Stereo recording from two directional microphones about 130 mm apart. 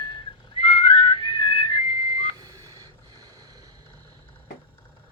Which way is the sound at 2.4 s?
30° right (ahead or behind).